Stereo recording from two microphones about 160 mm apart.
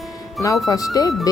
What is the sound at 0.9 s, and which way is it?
Speech, 20° left (ahead or behind).